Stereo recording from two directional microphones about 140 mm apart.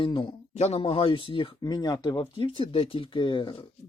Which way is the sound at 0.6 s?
50° left (ahead or behind).